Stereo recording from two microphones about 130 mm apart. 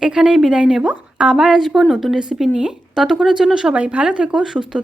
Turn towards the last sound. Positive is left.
turn(degrees=-5)  # may be behind; listen again after turning